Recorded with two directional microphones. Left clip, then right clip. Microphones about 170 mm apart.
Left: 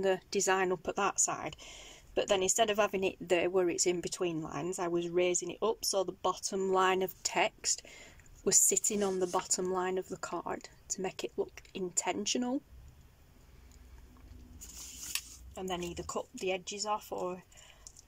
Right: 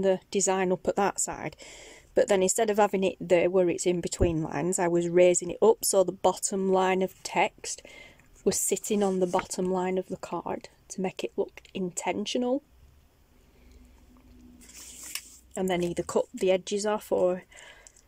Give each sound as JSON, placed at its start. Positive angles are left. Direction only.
{"t": 0.0, "sound": "speech", "side_deg": -20}
{"t": 15.5, "sound": "speech", "side_deg": -50}